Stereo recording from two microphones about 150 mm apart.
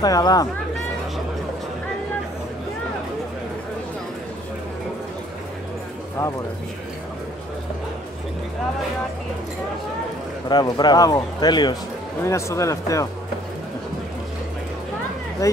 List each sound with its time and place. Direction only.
0.0 s a man's voice: 25° left (ahead or behind)
10.5 s a man's voice: 30° left (ahead or behind)
15.4 s speech: 20° left (ahead or behind)